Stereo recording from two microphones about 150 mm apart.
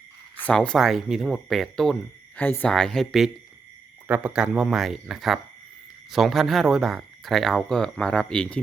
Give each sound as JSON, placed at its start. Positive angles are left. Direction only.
{"t": 0.3, "sound": "speech", "side_deg": 10}